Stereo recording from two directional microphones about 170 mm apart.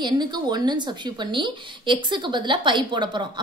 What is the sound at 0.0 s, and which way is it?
A woman's voice, 25° right (ahead or behind).